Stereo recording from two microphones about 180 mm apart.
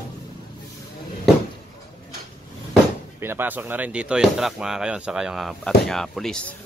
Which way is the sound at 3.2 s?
10° right (ahead or behind).